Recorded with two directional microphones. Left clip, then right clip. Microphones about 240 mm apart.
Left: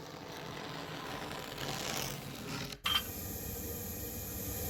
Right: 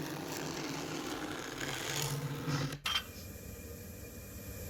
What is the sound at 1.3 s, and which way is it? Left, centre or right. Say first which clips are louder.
Vehicle: right 1 dB; centre.